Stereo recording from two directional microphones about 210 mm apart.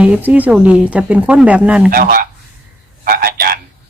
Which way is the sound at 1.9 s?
45° right (ahead or behind).